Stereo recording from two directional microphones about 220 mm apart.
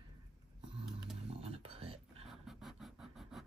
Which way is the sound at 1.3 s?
25° right (ahead or behind).